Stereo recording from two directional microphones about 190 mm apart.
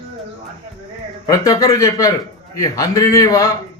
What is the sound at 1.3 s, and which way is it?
A man's voice, 15° left (ahead or behind).